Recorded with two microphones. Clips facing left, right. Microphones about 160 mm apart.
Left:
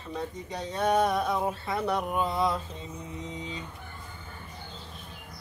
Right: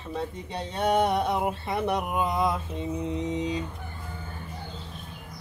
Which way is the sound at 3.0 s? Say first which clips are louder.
Right 10 dB; 75° right (ahead or behind).